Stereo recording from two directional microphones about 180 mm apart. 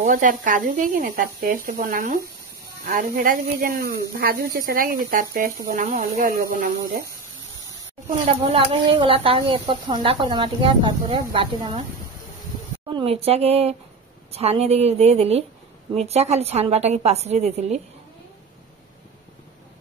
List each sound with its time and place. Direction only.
0.0 s speech: 50° right (ahead or behind)
8.3 s speech: 30° right (ahead or behind)
12.9 s a woman's voice: 35° right (ahead or behind)